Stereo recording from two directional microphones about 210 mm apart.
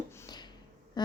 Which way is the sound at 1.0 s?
20° left (ahead or behind).